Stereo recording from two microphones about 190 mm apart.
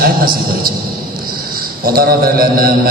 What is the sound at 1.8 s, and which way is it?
Speech, 50° right (ahead or behind).